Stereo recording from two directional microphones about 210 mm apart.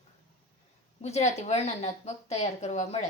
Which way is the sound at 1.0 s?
30° left (ahead or behind).